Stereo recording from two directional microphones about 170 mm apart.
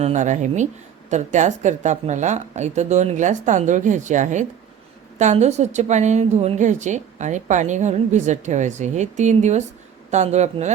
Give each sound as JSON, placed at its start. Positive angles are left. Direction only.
{"t": 0.0, "sound": "a woman's voice", "side_deg": -45}